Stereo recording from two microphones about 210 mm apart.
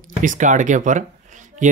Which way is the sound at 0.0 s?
40° right (ahead or behind).